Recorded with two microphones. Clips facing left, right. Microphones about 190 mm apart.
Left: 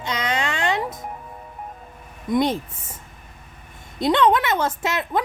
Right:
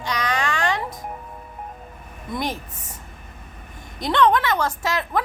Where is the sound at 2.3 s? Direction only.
25° left (ahead or behind).